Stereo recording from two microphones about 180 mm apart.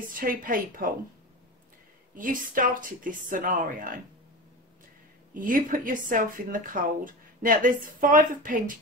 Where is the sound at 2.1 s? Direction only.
50° right (ahead or behind).